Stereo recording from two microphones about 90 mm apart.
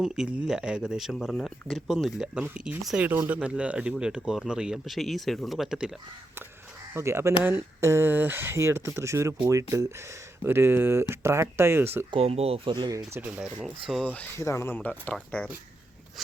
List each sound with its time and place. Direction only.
0.0 s speech: 5° right (ahead or behind)
1.3 s speech: 10° left (ahead or behind)
1.9 s speech: 5° right (ahead or behind)
6.9 s speech: 30° right (ahead or behind)
12.1 s speech: 90° right
12.7 s speech: 50° right (ahead or behind)
13.1 s speech: 20° right (ahead or behind)
13.4 s speech: 5° right (ahead or behind)
14.0 s speech: 15° left (ahead or behind)
14.3 s speech: 30° left (ahead or behind); by 15.4 s 10° left (ahead or behind)